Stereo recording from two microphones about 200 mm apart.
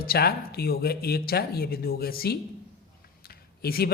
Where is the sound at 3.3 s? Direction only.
50° left (ahead or behind).